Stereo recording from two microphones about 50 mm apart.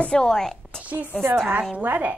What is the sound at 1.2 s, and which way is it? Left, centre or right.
Speech, right.